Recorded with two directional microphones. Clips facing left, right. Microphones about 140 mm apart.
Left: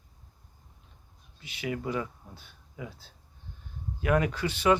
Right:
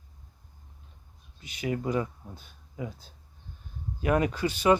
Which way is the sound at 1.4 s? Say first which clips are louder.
Right 3 dB; 35° right (ahead or behind).